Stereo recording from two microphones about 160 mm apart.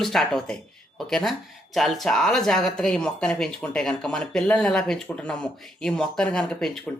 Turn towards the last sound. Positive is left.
turn(degrees=5)  # may be behind; listen again after turning